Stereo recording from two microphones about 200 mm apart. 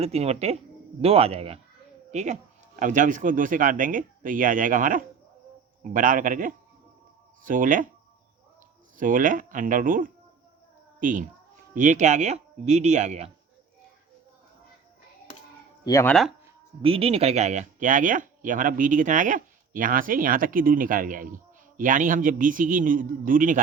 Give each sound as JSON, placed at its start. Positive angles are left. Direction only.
{"t": 0.0, "sound": "a man's voice", "side_deg": -30}
{"t": 9.0, "sound": "speech", "side_deg": -40}
{"t": 15.8, "sound": "speech", "side_deg": 15}
{"t": 16.8, "sound": "speech", "side_deg": -30}